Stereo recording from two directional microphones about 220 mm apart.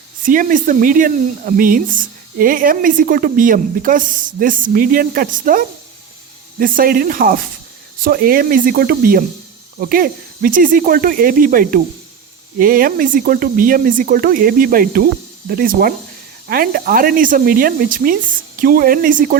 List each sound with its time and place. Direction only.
0.3 s speech: 35° right (ahead or behind)